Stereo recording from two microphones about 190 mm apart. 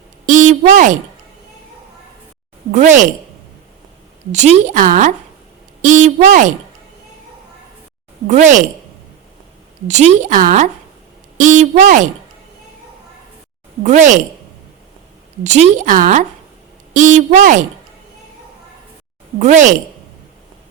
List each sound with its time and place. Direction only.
0.3 s speech: 40° right (ahead or behind)
2.7 s a woman's voice: 40° right (ahead or behind)
4.3 s a woman's voice: 40° right (ahead or behind)
8.3 s a woman's voice: 40° right (ahead or behind)
9.8 s a woman's voice: 35° right (ahead or behind)
13.8 s a woman's voice: 40° right (ahead or behind)
15.4 s a woman's voice: 40° right (ahead or behind)
19.4 s a woman's voice: 40° right (ahead or behind)